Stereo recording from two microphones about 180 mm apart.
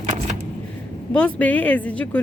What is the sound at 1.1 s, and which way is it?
Speech, 10° left (ahead or behind).